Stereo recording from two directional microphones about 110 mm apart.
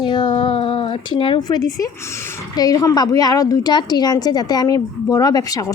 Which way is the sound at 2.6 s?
30° left (ahead or behind).